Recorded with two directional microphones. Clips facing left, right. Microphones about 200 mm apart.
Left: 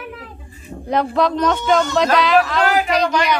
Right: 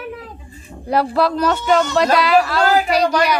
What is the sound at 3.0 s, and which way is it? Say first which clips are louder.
Speech: right 2 dB; 35° right (ahead or behind).